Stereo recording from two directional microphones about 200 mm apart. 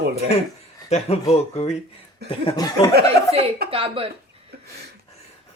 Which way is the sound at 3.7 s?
25° right (ahead or behind).